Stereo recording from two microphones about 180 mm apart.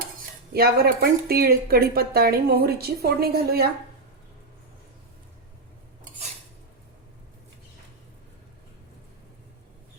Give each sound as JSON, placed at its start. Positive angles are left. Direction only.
{"t": 0.5, "sound": "speech", "side_deg": -60}